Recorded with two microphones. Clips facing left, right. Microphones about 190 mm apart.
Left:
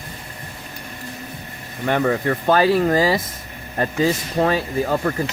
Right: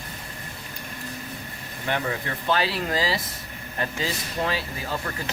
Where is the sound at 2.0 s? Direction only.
50° left (ahead or behind).